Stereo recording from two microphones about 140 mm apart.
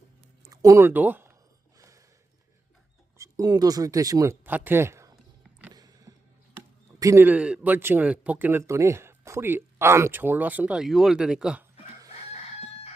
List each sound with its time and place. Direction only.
0.5 s speech: 25° right (ahead or behind)
3.2 s speech: 25° right (ahead or behind)
5.1 s a sound: 10° right (ahead or behind)
5.7 s music: 25° right (ahead or behind)
7.0 s speech: 20° right (ahead or behind)